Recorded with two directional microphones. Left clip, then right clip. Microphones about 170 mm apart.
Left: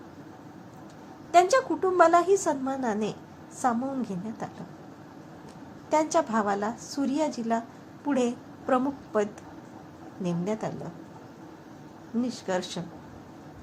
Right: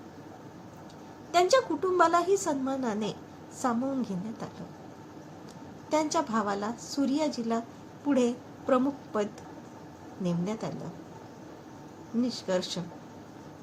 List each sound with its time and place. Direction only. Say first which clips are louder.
1.3 s a woman's voice: left 3 dB; 15° left (ahead or behind)
5.9 s a woman's voice: left 3 dB; 20° left (ahead or behind)
12.2 s a woman's voice: even; 15° left (ahead or behind)